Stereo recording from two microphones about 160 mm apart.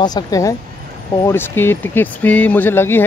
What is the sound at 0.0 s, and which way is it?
Speech, 25° left (ahead or behind).